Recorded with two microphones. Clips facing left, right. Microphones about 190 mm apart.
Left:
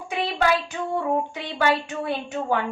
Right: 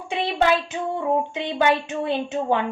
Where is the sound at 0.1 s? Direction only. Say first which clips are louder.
Right 2 dB; 25° right (ahead or behind).